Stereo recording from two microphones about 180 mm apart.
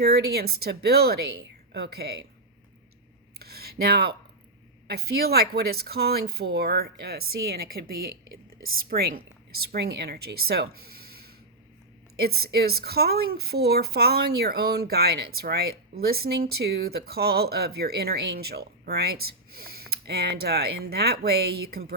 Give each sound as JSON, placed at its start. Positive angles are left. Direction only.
{"t": 0.0, "sound": "a woman's voice", "side_deg": -60}
{"t": 3.3, "sound": "a sound", "side_deg": -60}
{"t": 4.9, "sound": "a woman's voice", "side_deg": -60}
{"t": 12.1, "sound": "a woman's voice", "side_deg": -60}